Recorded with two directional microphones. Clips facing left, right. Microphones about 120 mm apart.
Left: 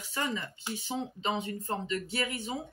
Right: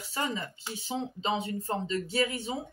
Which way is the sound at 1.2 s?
35° right (ahead or behind).